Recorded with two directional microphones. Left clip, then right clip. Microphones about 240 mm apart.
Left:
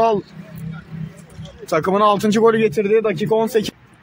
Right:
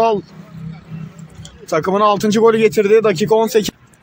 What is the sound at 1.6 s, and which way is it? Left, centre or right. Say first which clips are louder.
Speech: right 1 dB; centre.